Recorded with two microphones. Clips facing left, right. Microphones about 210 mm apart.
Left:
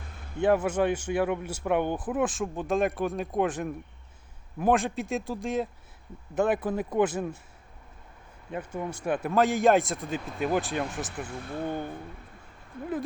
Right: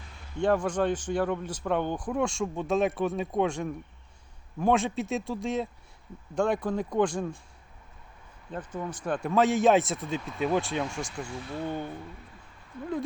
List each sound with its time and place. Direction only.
0.3 s a man's voice: 5° left (ahead or behind)
8.4 s a man's voice: 10° left (ahead or behind)
11.3 s speech: 55° left (ahead or behind)